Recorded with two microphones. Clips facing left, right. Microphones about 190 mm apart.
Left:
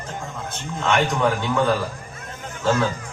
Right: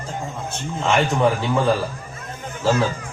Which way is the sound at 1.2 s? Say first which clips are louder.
Right 2 dB; 30° right (ahead or behind).